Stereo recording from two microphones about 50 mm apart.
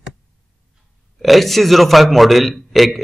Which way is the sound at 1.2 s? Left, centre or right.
Centre.